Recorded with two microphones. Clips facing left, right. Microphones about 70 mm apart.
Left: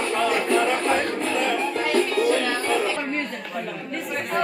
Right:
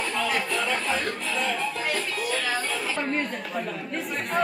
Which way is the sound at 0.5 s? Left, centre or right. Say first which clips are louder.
Left 6 dB; left.